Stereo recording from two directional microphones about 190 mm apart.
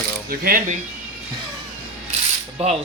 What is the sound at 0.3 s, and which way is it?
Speech, 50° right (ahead or behind).